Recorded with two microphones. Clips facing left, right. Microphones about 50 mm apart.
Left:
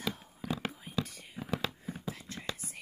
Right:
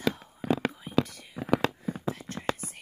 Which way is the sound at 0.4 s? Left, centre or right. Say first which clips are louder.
Right 9 dB; right.